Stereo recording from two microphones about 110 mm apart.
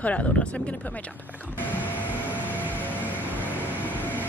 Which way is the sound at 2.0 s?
15° right (ahead or behind).